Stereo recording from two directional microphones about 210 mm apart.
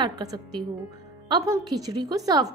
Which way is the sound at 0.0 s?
20° right (ahead or behind).